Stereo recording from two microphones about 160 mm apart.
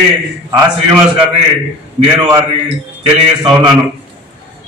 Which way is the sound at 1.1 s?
35° right (ahead or behind).